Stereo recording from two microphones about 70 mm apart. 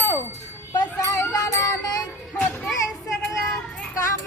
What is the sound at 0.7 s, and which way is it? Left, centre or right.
Speech, left.